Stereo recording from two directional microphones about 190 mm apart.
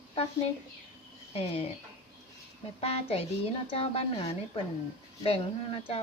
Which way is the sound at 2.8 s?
30° left (ahead or behind).